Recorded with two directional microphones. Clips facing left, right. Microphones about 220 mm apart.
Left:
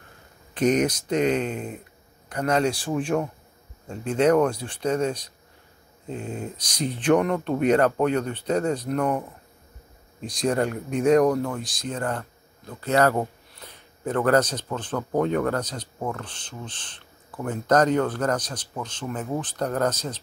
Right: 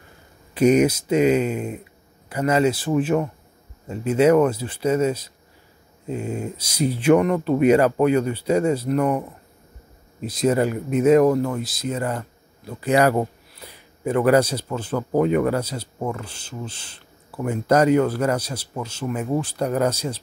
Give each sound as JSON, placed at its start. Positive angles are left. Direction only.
{"t": 0.6, "sound": "speech", "side_deg": -10}
{"t": 10.2, "sound": "speech", "side_deg": -5}